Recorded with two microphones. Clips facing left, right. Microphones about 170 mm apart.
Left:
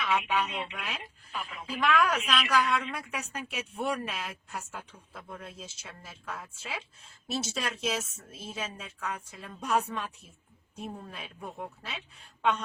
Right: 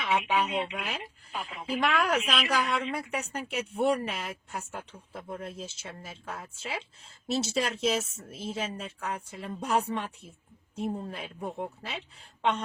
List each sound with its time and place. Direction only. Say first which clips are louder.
0.0 s speech: right 2 dB; 30° right (ahead or behind)